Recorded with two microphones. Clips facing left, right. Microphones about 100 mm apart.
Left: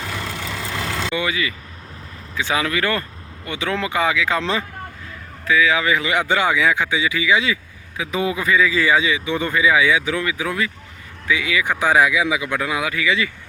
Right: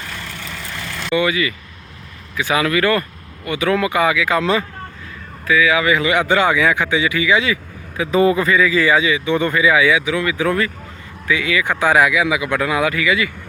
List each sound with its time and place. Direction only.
0.2 s vehicle: 90° left
1.1 s speech: 25° left (ahead or behind)
10.0 s speech: 35° left (ahead or behind)
10.3 s speech: 15° left (ahead or behind)